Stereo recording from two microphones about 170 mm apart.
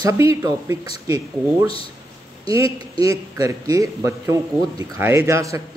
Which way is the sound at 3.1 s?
20° right (ahead or behind).